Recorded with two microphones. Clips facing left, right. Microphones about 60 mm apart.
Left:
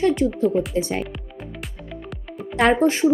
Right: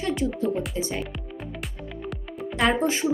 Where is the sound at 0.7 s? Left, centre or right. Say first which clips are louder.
Left 6 dB; left.